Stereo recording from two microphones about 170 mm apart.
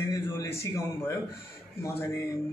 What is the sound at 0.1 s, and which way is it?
A man's voice, 15° left (ahead or behind).